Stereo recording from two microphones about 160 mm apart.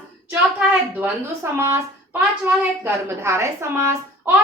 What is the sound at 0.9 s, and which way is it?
A woman's voice, 15° right (ahead or behind).